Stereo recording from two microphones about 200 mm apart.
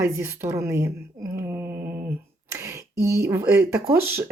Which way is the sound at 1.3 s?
10° right (ahead or behind).